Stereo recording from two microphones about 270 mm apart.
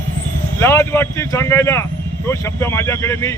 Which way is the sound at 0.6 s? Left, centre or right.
Centre.